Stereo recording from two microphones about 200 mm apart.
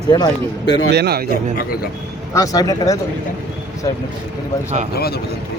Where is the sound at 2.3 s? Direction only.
15° left (ahead or behind).